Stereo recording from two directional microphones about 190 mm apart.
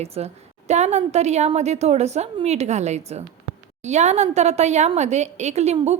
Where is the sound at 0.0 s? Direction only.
35° right (ahead or behind).